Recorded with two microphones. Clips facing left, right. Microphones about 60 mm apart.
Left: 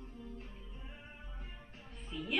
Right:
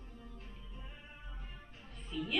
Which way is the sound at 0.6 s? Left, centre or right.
Centre.